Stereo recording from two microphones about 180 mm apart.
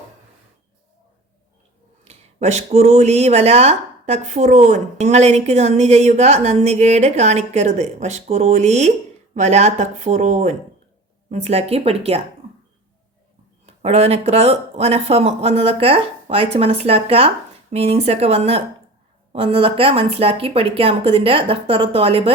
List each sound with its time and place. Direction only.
2.0 s speech: 40° right (ahead or behind)
13.7 s speech: 35° right (ahead or behind)